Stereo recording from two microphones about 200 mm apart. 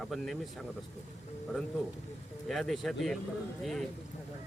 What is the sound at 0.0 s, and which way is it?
Speech, centre (ahead or behind).